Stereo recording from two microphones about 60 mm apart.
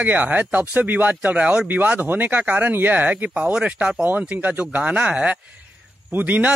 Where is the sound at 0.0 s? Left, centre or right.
Right.